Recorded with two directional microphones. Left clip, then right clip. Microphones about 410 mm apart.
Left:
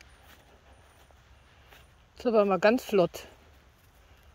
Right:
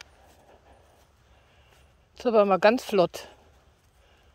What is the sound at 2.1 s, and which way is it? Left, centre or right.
Speech, centre.